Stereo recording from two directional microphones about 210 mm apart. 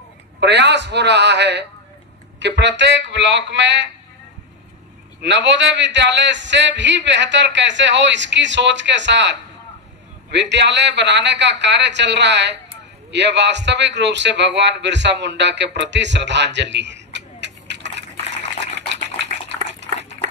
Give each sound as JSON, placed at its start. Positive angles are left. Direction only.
{"t": 0.4, "sound": "a man's voice", "side_deg": -55}
{"t": 5.2, "sound": "a man's voice", "side_deg": -55}
{"t": 18.9, "sound": "a sound", "side_deg": -60}